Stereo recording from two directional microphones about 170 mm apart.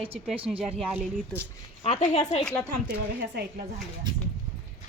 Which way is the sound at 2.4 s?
5° left (ahead or behind).